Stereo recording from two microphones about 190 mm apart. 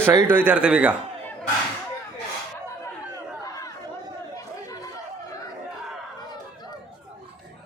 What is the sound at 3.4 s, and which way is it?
Chatter, 20° left (ahead or behind).